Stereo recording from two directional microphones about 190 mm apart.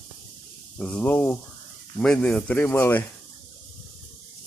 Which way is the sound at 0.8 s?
10° left (ahead or behind).